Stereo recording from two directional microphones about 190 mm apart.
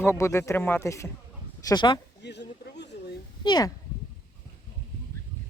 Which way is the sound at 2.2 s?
65° left (ahead or behind).